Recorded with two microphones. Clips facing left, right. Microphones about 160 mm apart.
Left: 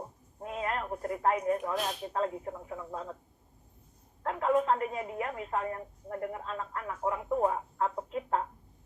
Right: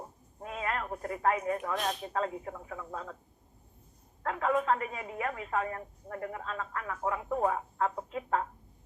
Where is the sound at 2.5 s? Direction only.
25° left (ahead or behind).